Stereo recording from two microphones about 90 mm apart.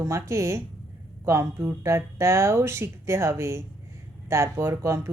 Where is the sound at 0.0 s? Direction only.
35° right (ahead or behind).